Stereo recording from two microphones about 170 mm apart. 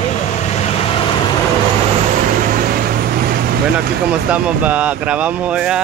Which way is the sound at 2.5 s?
60° right (ahead or behind).